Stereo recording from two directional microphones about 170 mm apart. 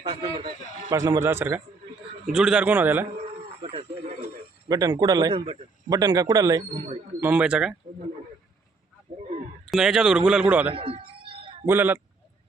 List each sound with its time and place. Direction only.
0.0 s a man's voice: 30° right (ahead or behind); by 3.1 s 10° right (ahead or behind)
3.6 s snake: 30° right (ahead or behind)
4.7 s a man's voice: 20° right (ahead or behind)
6.6 s speech: 30° right (ahead or behind)
7.2 s a man's voice: 10° right (ahead or behind)
9.1 s a sound: 45° right (ahead or behind)
9.6 s a man's voice: centre (ahead or behind)
10.8 s a sound: 30° right (ahead or behind)
11.6 s a man's voice: 10° right (ahead or behind)